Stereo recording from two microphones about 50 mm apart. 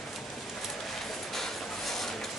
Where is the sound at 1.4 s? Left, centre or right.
Centre.